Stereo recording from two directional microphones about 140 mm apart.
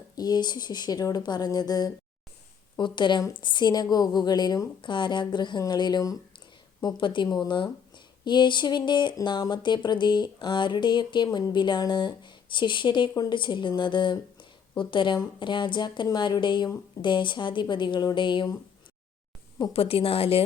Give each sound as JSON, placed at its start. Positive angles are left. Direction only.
{"t": 0.2, "sound": "speech", "side_deg": 30}
{"t": 19.7, "sound": "a woman's voice", "side_deg": 45}